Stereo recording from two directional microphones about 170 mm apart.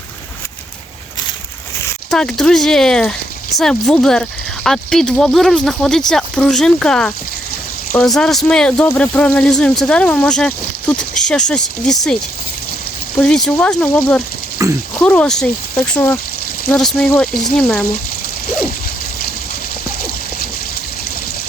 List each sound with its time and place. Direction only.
2.0 s speech: 5° left (ahead or behind)
13.1 s speech: 5° left (ahead or behind)
14.6 s speech: 15° right (ahead or behind)
14.9 s speech: 10° left (ahead or behind)